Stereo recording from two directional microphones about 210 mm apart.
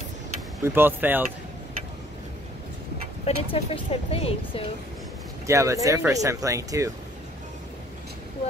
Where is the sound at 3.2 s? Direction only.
25° left (ahead or behind).